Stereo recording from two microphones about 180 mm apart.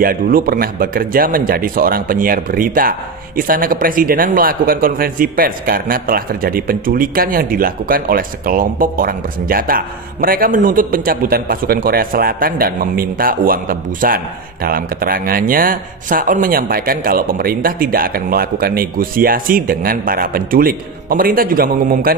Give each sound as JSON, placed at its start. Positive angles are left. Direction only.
{"t": 0.0, "sound": "speech", "side_deg": -55}